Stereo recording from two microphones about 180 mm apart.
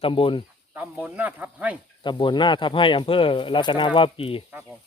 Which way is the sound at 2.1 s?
25° left (ahead or behind).